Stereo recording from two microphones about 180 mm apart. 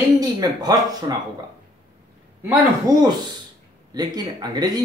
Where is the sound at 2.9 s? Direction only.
20° right (ahead or behind).